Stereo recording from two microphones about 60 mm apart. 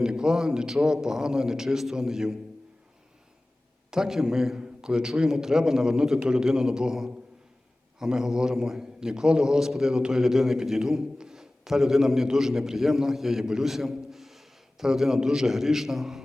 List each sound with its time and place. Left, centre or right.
0.0 s a man's voice: centre
3.9 s a man's voice: centre